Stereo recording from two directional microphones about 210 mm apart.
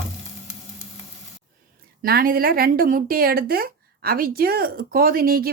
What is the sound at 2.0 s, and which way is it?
A woman's voice, 45° right (ahead or behind).